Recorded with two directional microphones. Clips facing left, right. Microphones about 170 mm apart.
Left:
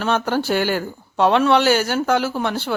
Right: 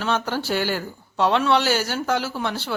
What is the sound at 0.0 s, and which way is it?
Speech, 50° left (ahead or behind).